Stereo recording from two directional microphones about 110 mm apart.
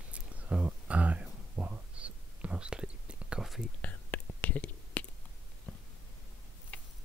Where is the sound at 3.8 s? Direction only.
15° left (ahead or behind).